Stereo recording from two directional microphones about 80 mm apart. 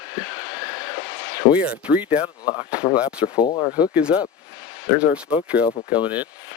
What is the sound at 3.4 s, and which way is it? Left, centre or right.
Speech, left.